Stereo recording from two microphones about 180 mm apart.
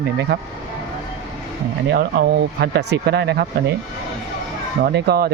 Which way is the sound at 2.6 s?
65° right (ahead or behind).